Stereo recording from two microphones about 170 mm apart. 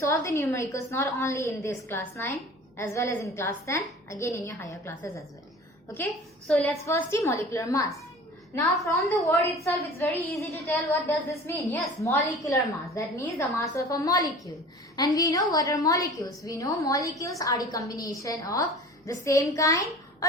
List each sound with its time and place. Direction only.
0.0 s a woman's voice: 15° left (ahead or behind)
6.5 s a woman's voice: 5° left (ahead or behind)
6.8 s a woman's voice: 15° left (ahead or behind)